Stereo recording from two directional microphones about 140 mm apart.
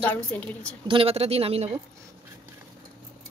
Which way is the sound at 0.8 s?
40° right (ahead or behind).